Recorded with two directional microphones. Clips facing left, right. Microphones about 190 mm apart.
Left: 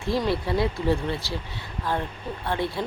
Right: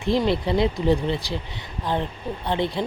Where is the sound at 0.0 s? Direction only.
20° right (ahead or behind).